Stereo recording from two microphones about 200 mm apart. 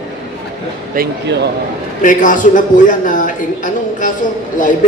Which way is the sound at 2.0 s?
40° left (ahead or behind).